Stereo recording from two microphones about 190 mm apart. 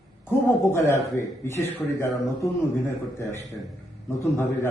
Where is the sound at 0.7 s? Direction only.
15° left (ahead or behind).